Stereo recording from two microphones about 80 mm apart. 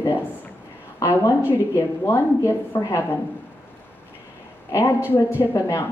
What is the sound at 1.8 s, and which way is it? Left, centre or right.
Speech, left.